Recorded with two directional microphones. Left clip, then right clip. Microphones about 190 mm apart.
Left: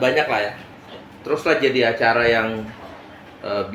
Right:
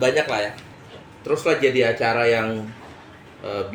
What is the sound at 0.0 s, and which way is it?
Speech, 45° right (ahead or behind).